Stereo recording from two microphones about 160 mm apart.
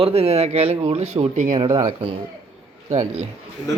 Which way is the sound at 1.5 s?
25° right (ahead or behind).